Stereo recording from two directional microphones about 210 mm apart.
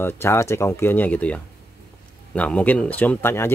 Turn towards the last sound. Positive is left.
turn(degrees=10)  # may be behind; listen again after turning